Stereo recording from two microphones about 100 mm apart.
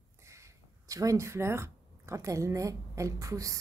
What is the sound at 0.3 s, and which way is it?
A woman's voice, 30° right (ahead or behind).